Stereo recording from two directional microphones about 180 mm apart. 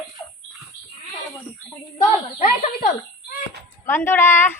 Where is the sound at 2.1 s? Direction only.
40° left (ahead or behind).